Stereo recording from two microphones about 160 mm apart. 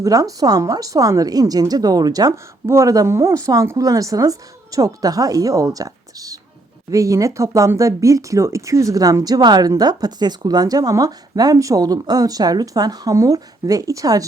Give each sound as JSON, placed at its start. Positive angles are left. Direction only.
{"t": 0.0, "sound": "speech", "side_deg": -20}